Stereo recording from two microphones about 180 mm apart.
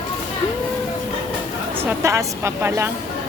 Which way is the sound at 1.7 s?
15° right (ahead or behind).